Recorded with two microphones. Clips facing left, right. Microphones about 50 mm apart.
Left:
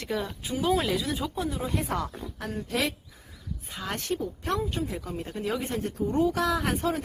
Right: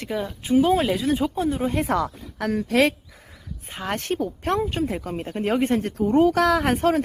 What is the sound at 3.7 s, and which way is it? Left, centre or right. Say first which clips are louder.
Speech: right 5 dB; right.